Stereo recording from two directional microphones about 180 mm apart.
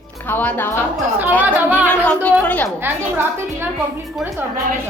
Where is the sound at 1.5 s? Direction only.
10° right (ahead or behind).